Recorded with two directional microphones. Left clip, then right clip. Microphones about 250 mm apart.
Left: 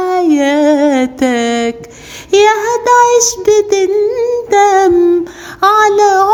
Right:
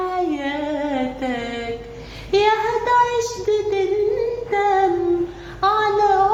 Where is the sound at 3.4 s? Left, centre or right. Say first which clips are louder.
Left 10 dB; left.